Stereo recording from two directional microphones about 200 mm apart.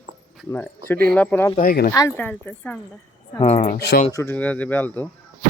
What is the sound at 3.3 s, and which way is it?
Speech, 30° left (ahead or behind).